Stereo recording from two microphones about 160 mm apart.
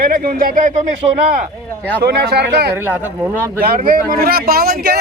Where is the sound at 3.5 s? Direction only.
65° right (ahead or behind).